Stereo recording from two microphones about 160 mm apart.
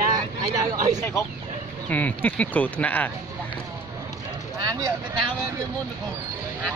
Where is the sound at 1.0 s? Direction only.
20° left (ahead or behind).